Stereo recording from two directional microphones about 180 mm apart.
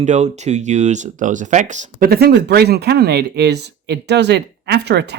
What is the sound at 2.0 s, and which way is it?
Speech, 60° right (ahead or behind).